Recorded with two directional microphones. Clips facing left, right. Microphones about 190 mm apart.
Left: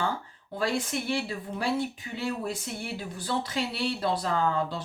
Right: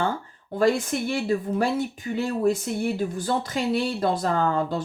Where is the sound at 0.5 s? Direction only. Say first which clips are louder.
Right 7 dB; 45° right (ahead or behind).